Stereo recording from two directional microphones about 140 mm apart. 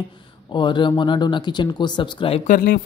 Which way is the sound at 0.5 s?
35° left (ahead or behind).